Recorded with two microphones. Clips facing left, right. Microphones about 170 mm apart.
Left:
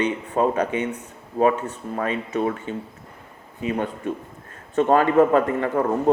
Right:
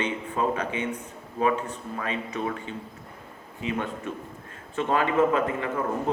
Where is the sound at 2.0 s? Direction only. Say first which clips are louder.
Left 7 dB; 40° left (ahead or behind).